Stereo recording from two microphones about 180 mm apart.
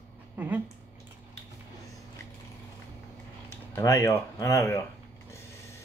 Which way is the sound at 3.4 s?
15° left (ahead or behind).